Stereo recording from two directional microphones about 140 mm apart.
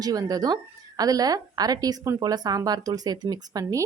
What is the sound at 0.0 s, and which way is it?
A woman's voice, 25° right (ahead or behind).